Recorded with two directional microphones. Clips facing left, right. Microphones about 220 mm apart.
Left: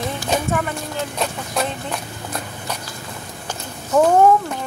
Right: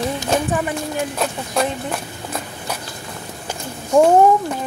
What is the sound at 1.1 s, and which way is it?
Speech, 5° right (ahead or behind).